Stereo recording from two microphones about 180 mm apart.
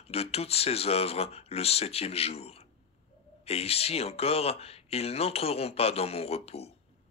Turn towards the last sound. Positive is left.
turn(degrees=35)  # may be behind; listen again after turning